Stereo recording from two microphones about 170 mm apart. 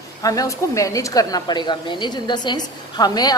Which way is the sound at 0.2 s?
20° left (ahead or behind).